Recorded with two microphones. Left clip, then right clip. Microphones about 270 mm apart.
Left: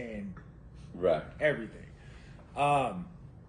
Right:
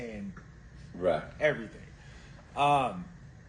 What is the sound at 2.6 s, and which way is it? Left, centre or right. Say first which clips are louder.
Speech: right 2 dB; centre.